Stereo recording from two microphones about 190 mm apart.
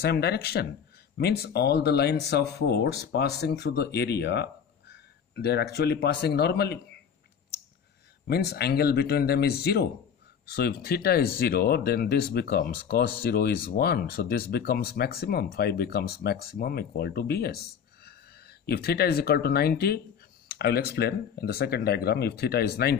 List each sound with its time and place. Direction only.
0.0 s speech: 60° left (ahead or behind)
8.3 s speech: 60° left (ahead or behind)
18.7 s speech: 55° left (ahead or behind)